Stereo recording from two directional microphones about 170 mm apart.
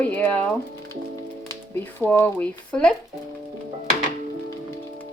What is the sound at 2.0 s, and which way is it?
Speech, 10° left (ahead or behind).